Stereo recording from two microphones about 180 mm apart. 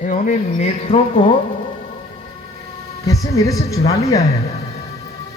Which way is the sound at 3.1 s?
20° left (ahead or behind).